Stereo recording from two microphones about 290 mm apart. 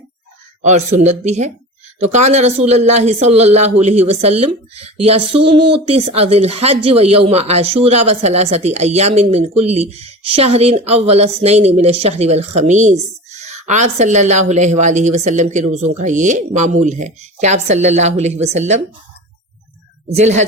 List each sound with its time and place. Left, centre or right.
0.6 s speech: right
20.1 s speech: right